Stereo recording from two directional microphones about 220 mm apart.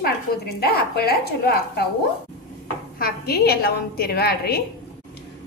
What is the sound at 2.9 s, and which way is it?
A woman's voice, 45° left (ahead or behind).